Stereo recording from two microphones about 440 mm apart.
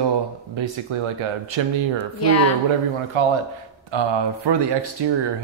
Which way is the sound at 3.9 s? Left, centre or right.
Right.